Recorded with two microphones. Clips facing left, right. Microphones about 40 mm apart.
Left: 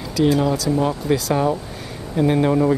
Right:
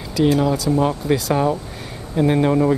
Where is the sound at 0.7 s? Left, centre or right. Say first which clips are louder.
Right 1 dB; right.